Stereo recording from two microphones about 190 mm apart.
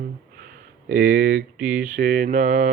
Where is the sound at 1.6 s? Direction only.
5° right (ahead or behind).